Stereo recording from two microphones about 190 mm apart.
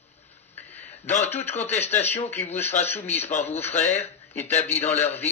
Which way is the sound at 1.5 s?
35° left (ahead or behind).